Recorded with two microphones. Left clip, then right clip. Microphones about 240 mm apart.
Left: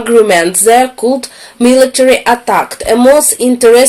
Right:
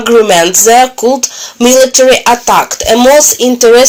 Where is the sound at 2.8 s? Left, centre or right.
Centre.